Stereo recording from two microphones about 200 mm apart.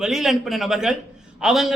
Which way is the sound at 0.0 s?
Centre (ahead or behind).